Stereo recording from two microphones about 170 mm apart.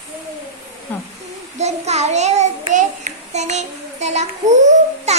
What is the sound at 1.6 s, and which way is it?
A child's voice, 40° right (ahead or behind).